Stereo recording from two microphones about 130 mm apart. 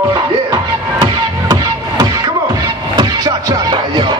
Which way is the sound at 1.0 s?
30° right (ahead or behind).